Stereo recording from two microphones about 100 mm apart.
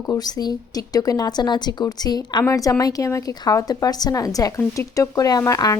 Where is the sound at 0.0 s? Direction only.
40° left (ahead or behind).